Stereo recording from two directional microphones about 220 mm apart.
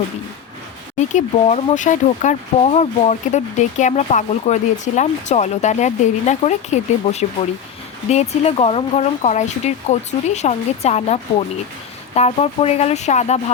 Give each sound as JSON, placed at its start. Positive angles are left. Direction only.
{"t": 0.9, "sound": "speech", "side_deg": 30}